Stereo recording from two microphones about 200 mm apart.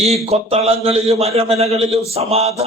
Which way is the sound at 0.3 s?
30° right (ahead or behind).